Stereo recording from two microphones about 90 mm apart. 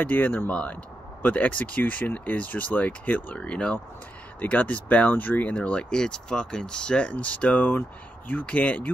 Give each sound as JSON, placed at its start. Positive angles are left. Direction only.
{"t": 0.0, "sound": "speech", "side_deg": 20}